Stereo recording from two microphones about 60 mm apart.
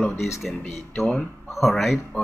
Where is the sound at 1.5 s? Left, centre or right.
Centre.